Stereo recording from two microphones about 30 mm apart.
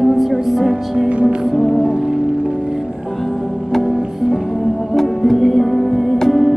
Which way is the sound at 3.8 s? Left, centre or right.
Centre.